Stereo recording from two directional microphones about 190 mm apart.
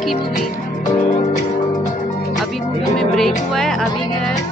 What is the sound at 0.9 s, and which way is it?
Music, 40° left (ahead or behind).